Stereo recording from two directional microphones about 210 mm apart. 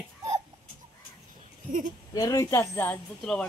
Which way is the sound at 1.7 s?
40° right (ahead or behind).